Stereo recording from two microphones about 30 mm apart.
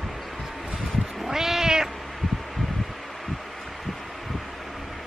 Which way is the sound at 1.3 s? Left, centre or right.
Centre.